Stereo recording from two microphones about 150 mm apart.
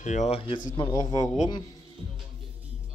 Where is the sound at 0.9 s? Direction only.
25° left (ahead or behind).